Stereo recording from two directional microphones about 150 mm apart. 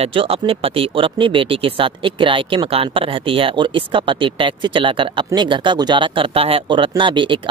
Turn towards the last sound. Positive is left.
turn(degrees=-35)  # may be behind; listen again after turning